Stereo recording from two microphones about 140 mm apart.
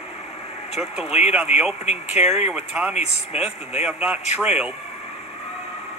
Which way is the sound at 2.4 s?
5° right (ahead or behind).